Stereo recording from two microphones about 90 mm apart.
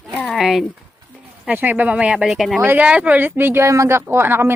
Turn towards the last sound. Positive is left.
turn(degrees=-25)  # may be behind; listen again after turning